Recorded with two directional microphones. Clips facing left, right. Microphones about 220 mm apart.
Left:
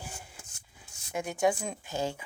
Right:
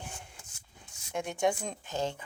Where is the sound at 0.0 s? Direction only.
5° left (ahead or behind).